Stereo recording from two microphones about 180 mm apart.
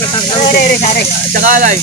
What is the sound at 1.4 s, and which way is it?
Speech, 45° right (ahead or behind).